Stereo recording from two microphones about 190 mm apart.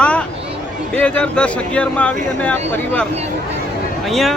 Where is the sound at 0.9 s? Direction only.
5° left (ahead or behind).